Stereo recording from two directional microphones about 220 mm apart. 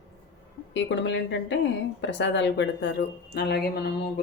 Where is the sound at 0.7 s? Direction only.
55° left (ahead or behind).